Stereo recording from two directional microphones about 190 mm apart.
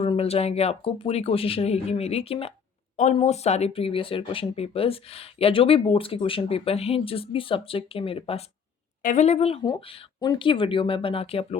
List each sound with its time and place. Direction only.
0.0 s speech: 30° left (ahead or behind)
9.0 s speech: 40° left (ahead or behind)